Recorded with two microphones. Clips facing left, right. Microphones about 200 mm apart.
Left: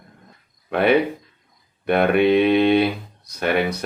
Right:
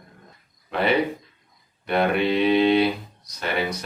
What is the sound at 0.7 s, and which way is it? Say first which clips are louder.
Speech: left 4 dB; 55° left (ahead or behind).